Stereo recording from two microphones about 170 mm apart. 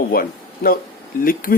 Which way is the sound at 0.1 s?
60° left (ahead or behind).